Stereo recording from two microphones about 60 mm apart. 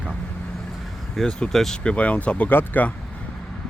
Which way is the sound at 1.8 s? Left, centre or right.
Left.